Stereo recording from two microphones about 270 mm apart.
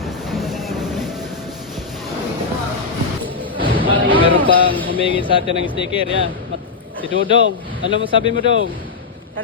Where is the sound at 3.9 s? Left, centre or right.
Centre.